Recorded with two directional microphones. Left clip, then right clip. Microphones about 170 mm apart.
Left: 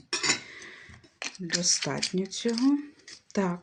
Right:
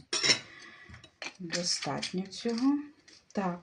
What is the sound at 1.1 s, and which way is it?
Speech, 55° left (ahead or behind).